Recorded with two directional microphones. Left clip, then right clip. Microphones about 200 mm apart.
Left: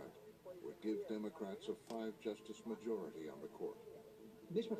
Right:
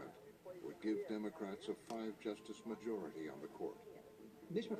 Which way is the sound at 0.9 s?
45° right (ahead or behind).